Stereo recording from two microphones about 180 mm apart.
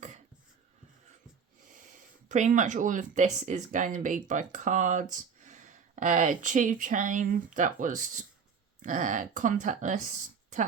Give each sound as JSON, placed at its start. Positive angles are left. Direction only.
{"t": 1.6, "sound": "speech", "side_deg": -45}